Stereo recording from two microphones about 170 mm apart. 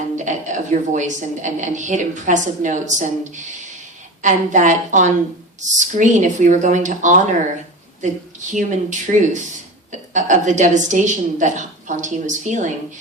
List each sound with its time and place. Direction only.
0.2 s a woman's voice: 45° right (ahead or behind)
8.5 s a woman's voice: 45° right (ahead or behind)